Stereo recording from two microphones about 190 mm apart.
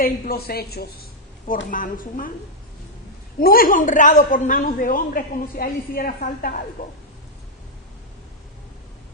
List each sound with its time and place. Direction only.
0.0 s a man's voice: 50° left (ahead or behind)
1.7 s a man's voice: 45° left (ahead or behind)
3.4 s a man's voice: 50° left (ahead or behind)